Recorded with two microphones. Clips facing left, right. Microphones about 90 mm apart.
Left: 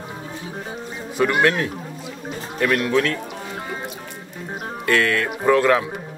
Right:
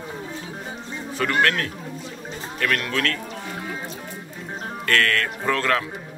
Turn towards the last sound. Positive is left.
turn(degrees=15)  # may be behind; listen again after turning